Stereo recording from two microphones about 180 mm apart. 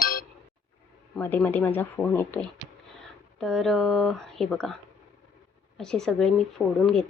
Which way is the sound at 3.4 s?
Centre (ahead or behind).